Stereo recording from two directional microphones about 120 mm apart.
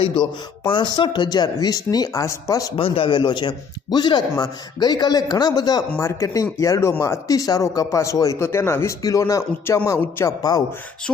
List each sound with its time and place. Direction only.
0.0 s speech: 40° left (ahead or behind)
2.7 s speech: 50° left (ahead or behind)
6.0 s speech: 25° left (ahead or behind)